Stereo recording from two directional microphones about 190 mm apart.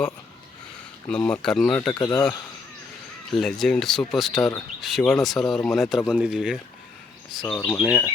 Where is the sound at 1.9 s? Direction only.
20° left (ahead or behind).